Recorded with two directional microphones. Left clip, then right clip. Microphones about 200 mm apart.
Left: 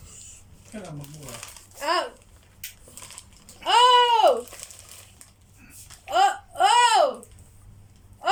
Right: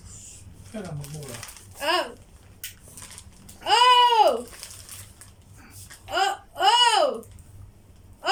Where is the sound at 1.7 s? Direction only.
10° right (ahead or behind).